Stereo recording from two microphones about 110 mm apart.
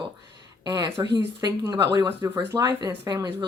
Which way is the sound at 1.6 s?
25° right (ahead or behind).